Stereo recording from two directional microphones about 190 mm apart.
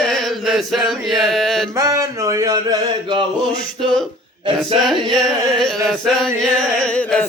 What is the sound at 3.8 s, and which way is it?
Chant, centre (ahead or behind).